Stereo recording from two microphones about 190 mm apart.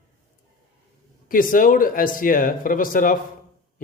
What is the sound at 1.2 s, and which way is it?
Speech, 45° left (ahead or behind).